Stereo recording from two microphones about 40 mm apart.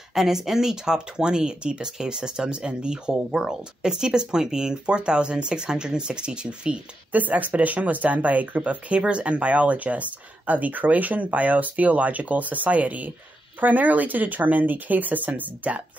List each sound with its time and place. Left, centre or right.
0.1 s speech: centre
7.1 s speech: right